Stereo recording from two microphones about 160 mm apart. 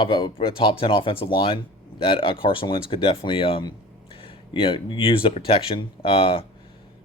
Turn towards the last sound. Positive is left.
turn(degrees=35)  # may be behind; listen again after turning